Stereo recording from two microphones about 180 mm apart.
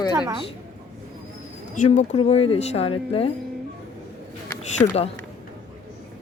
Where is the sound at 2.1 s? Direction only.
35° left (ahead or behind).